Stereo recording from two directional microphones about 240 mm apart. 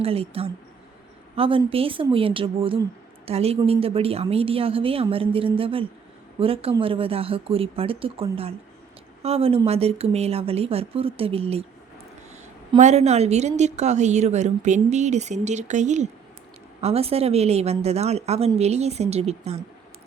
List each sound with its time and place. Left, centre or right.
0.0 s a woman's voice: right
12.7 s a woman's voice: right